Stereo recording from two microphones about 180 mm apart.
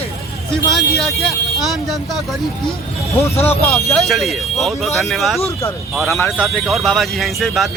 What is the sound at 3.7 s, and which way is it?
Speech, centre (ahead or behind).